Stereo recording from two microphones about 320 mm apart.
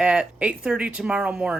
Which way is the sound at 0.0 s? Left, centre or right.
Centre.